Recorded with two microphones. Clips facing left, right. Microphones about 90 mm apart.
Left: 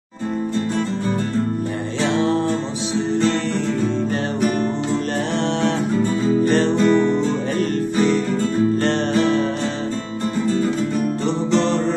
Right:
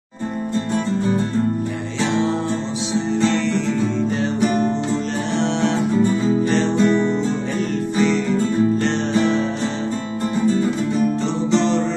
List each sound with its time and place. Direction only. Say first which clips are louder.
6.8 s music: even; 10° right (ahead or behind)
8.7 s music: left 1 dB; 55° left (ahead or behind)